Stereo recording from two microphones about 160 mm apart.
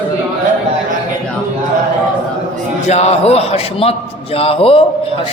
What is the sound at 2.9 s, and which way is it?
A man's voice, 40° left (ahead or behind).